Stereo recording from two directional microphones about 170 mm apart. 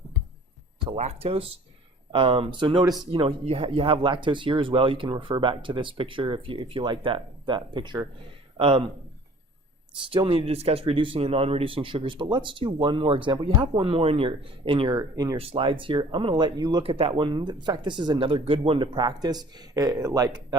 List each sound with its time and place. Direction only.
0.9 s speech: 35° right (ahead or behind)
10.1 s speech: 30° right (ahead or behind)
15.4 s speech: 35° right (ahead or behind)